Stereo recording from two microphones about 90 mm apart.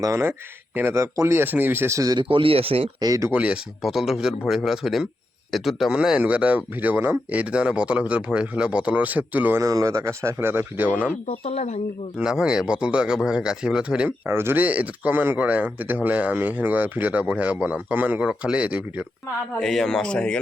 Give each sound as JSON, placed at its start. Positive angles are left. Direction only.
{"t": 0.0, "sound": "speech", "side_deg": -30}
{"t": 2.1, "sound": "speech", "side_deg": -75}
{"t": 3.0, "sound": "speech", "side_deg": -40}
{"t": 3.3, "sound": "speech", "side_deg": -15}
{"t": 3.8, "sound": "a man's voice", "side_deg": -5}
{"t": 9.6, "sound": "speech", "side_deg": -35}
{"t": 12.1, "sound": "speech", "side_deg": -10}
{"t": 14.3, "sound": "speech", "side_deg": -25}
{"t": 19.5, "sound": "speech", "side_deg": 5}